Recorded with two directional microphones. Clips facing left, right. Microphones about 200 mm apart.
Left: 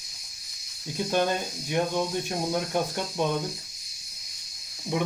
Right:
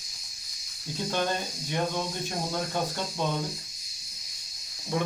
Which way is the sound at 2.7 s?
15° left (ahead or behind).